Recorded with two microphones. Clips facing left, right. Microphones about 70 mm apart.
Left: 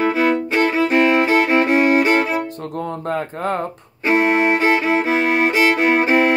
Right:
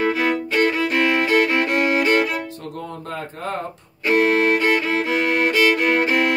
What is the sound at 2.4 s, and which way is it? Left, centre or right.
Music, left.